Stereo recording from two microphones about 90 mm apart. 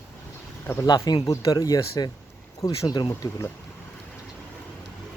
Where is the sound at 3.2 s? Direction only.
40° left (ahead or behind).